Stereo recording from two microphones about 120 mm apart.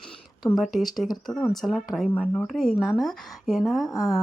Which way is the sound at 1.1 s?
35° left (ahead or behind).